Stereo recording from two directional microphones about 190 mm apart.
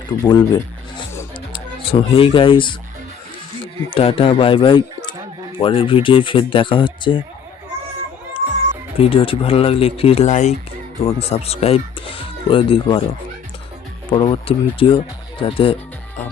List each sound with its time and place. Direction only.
0.2 s speech: 20° left (ahead or behind)
1.5 s speech: 30° left (ahead or behind)
3.8 s speech: 30° left (ahead or behind)
9.0 s speech: 30° left (ahead or behind)
14.1 s speech: 30° left (ahead or behind)